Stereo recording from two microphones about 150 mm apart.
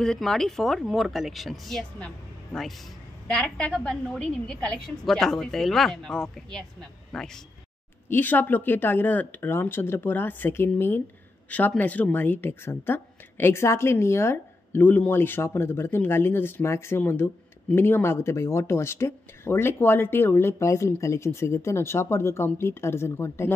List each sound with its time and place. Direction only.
0.0 s a woman's voice: 5° left (ahead or behind)
8.1 s speech: 10° left (ahead or behind)